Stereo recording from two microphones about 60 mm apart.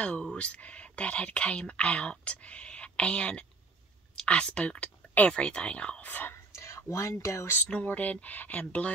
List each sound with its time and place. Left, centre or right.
0.0 s speech: centre
6.3 s whispering: left
7.6 s speech: left